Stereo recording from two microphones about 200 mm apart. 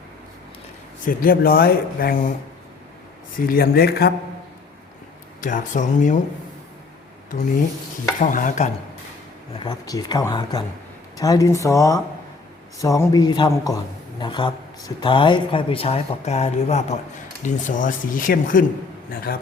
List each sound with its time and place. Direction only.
1.0 s speech: 45° left (ahead or behind)
3.4 s speech: 50° left (ahead or behind)
5.4 s speech: 40° left (ahead or behind)
8.2 s speech: 40° left (ahead or behind)
9.6 s a man's voice: 20° left (ahead or behind); by 18.6 s 45° left (ahead or behind)